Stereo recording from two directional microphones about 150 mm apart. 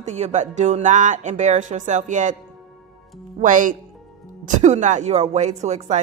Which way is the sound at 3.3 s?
60° right (ahead or behind).